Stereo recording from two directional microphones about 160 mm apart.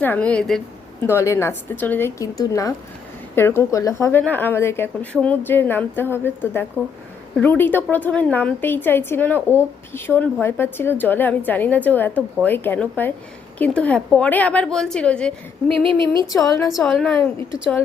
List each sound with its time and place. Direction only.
0.0 s a woman's voice: 10° left (ahead or behind)
1.0 s a woman's voice: 15° left (ahead or behind)
15.8 s speech: 30° right (ahead or behind)
16.4 s a woman's voice: 20° left (ahead or behind)
16.6 s a woman's voice: centre (ahead or behind)